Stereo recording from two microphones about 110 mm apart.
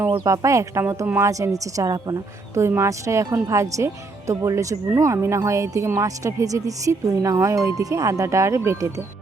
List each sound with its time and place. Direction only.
0.3 s speech: 30° right (ahead or behind)
1.3 s a woman's voice: 30° right (ahead or behind)
2.6 s speech: 25° right (ahead or behind)